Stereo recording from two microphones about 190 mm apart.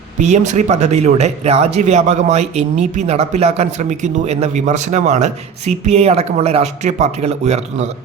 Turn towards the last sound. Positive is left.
turn(degrees=-35)  # may be behind; listen again after turning